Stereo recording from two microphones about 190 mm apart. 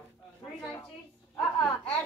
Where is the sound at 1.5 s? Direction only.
5° left (ahead or behind).